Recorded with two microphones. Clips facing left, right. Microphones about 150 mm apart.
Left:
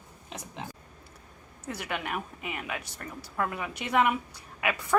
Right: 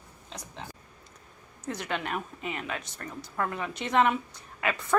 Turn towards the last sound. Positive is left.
turn(degrees=10)  # may be behind; listen again after turning